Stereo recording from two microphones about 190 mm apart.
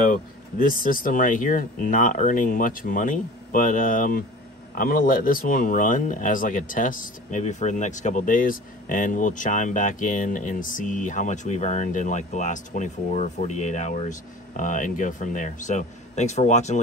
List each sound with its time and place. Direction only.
0.0 s speech: 45° left (ahead or behind)